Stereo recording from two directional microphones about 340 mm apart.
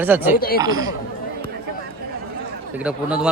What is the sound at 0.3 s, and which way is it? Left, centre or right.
Speech, left.